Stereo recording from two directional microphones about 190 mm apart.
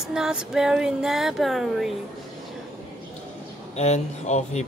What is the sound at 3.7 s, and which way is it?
Speech, 35° left (ahead or behind).